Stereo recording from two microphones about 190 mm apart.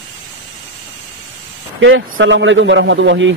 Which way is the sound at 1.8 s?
80° right.